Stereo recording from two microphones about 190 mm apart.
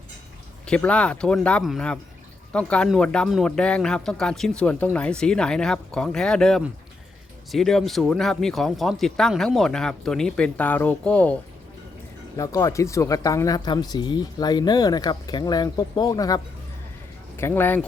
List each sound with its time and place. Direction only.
0.6 s a man's voice: 5° left (ahead or behind)
12.4 s speech: 15° left (ahead or behind)